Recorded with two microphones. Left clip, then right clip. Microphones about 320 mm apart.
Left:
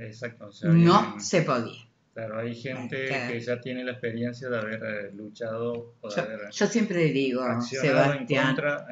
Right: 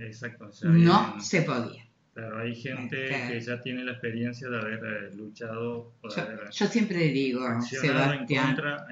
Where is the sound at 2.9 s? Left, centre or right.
Centre.